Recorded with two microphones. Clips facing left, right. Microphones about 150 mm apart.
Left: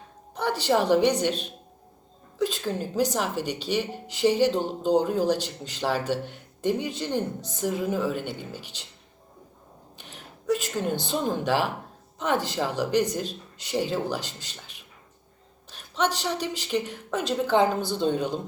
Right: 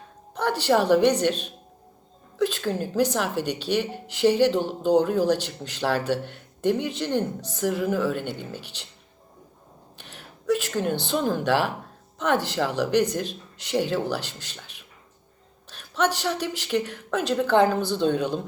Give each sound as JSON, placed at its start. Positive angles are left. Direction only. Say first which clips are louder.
{"t": 0.3, "sound": "a woman's voice", "louder": "right 2 dB", "side_deg": 10}
{"t": 2.6, "sound": "a woman's voice", "louder": "right 2 dB", "side_deg": -10}
{"t": 2.9, "sound": "speech", "louder": "right 2 dB", "side_deg": 15}
{"t": 10.0, "sound": "a sound", "louder": "even", "side_deg": 15}
{"t": 10.9, "sound": "speech", "louder": "right 2 dB", "side_deg": 15}
{"t": 15.7, "sound": "a sound", "louder": "right 2 dB", "side_deg": 15}
{"t": 16.6, "sound": "speech", "louder": "right 2 dB", "side_deg": 15}